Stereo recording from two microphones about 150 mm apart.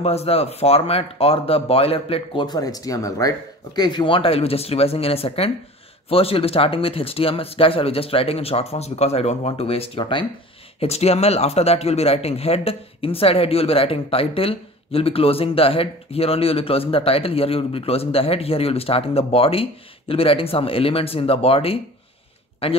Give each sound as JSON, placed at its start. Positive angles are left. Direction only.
{"t": 0.0, "sound": "speech", "side_deg": 45}